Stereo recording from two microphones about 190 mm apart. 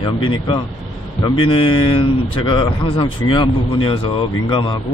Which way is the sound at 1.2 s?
25° left (ahead or behind).